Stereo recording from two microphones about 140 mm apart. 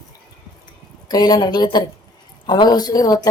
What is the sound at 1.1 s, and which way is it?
Speech, 30° left (ahead or behind).